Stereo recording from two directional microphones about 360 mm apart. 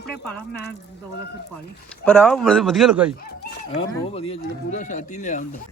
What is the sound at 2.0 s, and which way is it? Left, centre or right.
Speech, centre.